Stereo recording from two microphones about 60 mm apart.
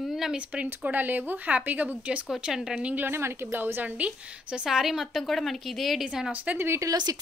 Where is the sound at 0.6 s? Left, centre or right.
Right.